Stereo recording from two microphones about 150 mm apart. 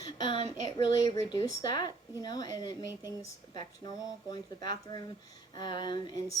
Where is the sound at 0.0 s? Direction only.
30° left (ahead or behind).